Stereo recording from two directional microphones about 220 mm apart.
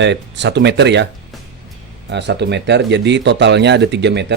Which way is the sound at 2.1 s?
50° right (ahead or behind).